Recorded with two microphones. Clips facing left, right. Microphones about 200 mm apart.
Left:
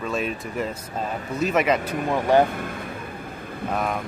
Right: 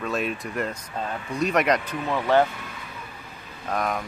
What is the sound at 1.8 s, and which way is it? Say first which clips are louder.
Speech: left 3 dB; 45° left (ahead or behind).